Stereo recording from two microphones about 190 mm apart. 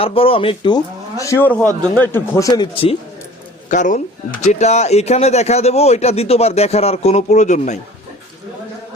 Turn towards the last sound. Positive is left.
turn(degrees=40)  # may be behind; listen again after turning